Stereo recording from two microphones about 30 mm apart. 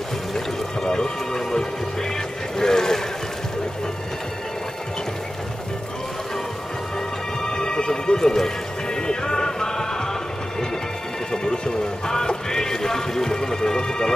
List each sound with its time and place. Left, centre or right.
0.8 s music: left
2.5 s boat: left
7.4 s music: left
11.3 s music: left